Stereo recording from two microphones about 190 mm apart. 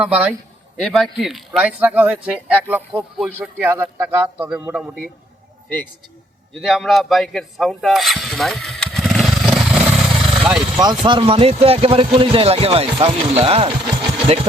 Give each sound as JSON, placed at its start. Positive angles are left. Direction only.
{"t": 0.0, "sound": "speech", "side_deg": -5}
{"t": 6.6, "sound": "vehicle", "side_deg": 0}
{"t": 11.0, "sound": "speech", "side_deg": -25}